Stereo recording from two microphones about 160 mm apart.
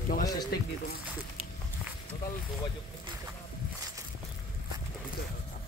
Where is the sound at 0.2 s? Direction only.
25° left (ahead or behind).